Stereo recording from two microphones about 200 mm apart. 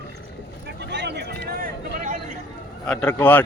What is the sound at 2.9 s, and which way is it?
Speech, 5° left (ahead or behind).